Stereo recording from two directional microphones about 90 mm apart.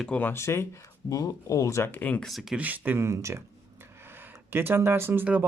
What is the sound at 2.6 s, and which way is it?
Speech, 20° right (ahead or behind).